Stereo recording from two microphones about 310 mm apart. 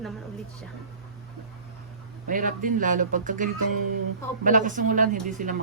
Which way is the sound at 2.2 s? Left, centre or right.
Right.